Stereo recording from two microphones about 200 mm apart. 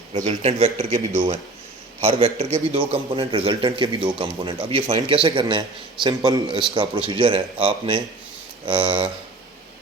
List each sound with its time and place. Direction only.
0.3 s speech: 30° right (ahead or behind)
2.0 s a man's voice: 30° right (ahead or behind)